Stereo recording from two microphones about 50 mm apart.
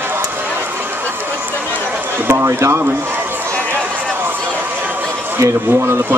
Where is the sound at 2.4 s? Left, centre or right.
Right.